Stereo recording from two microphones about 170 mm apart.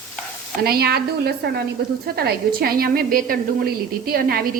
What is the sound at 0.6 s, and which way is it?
A woman's voice, 65° right (ahead or behind).